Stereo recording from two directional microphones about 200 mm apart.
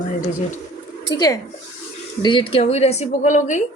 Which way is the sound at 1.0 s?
20° left (ahead or behind).